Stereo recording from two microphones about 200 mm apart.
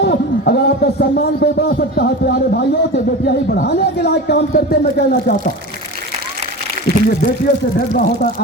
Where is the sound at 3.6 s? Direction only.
55° left (ahead or behind).